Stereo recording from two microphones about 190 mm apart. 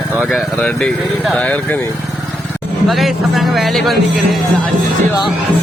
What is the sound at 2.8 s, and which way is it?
Speech, centre (ahead or behind).